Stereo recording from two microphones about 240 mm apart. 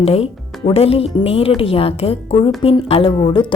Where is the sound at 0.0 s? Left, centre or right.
Left.